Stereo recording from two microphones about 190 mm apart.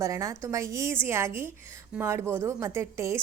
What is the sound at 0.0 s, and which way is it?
A woman's voice, 15° right (ahead or behind).